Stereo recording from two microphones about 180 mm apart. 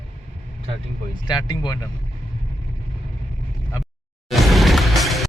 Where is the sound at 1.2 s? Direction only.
25° left (ahead or behind).